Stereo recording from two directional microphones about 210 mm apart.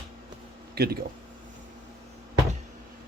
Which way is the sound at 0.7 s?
50° right (ahead or behind).